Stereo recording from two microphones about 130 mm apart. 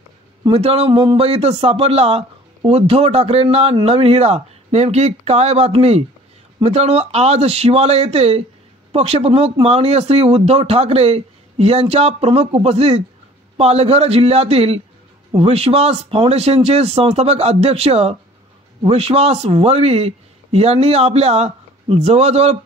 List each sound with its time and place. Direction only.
0.5 s a man's voice: 50° right (ahead or behind)